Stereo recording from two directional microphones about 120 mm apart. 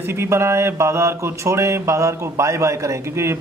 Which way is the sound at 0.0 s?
20° right (ahead or behind).